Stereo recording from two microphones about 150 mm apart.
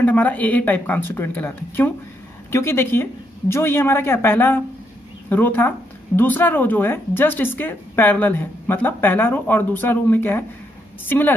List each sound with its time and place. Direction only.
0.0 s speech: 10° left (ahead or behind)